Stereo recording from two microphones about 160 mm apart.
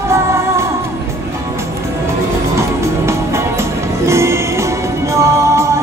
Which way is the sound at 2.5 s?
15° right (ahead or behind).